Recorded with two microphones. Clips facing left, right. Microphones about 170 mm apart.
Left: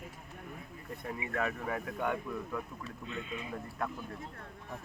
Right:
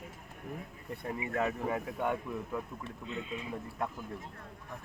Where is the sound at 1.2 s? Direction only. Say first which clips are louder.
Right 3 dB; 20° right (ahead or behind).